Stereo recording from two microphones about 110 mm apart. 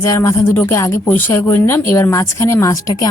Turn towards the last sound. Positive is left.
turn(degrees=30)  # may be behind; listen again after turning